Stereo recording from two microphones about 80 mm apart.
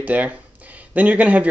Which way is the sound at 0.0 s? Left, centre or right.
Centre.